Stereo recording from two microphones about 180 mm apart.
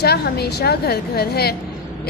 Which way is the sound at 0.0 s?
60° left (ahead or behind).